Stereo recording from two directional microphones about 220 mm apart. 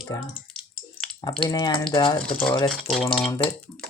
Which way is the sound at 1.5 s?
15° left (ahead or behind).